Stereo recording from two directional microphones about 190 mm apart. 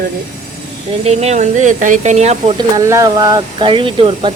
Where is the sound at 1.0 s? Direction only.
35° right (ahead or behind).